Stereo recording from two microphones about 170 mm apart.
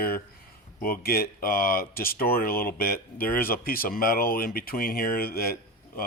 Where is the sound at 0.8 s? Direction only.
60° left (ahead or behind).